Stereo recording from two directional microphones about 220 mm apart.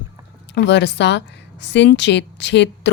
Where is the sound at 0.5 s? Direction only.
50° left (ahead or behind).